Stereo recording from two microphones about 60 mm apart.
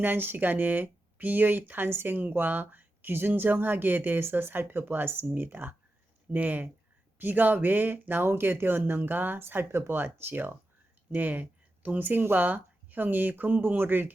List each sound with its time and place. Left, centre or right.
0.0 s speech: right